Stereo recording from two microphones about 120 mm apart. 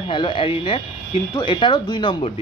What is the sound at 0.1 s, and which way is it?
Speech, 45° left (ahead or behind).